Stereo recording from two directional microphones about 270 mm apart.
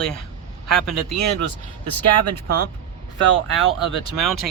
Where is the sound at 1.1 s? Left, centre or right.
Right.